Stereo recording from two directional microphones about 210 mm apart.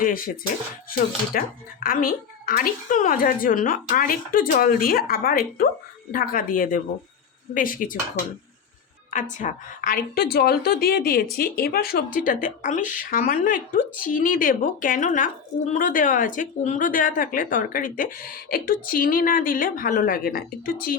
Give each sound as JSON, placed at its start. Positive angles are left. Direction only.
{"t": 0.0, "sound": "a woman's voice", "side_deg": 40}
{"t": 9.0, "sound": "a woman's voice", "side_deg": 35}